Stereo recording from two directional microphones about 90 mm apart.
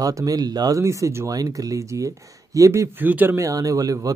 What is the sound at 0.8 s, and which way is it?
Speech, 35° right (ahead or behind).